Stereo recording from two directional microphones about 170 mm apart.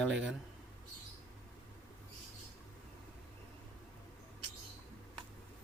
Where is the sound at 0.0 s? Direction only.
5° right (ahead or behind).